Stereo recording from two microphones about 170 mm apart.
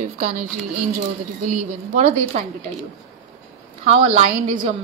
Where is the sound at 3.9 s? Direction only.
40° right (ahead or behind).